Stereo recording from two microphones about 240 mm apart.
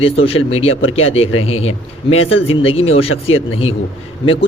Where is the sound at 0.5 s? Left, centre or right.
Left.